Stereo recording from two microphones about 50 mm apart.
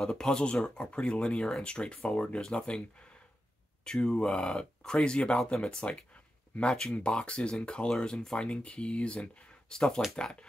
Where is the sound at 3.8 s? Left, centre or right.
Centre.